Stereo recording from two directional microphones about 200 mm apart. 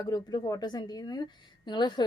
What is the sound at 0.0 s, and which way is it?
A woman's voice, 20° left (ahead or behind).